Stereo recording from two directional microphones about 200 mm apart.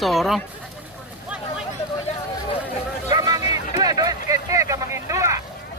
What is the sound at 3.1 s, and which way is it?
Vehicle, 20° right (ahead or behind).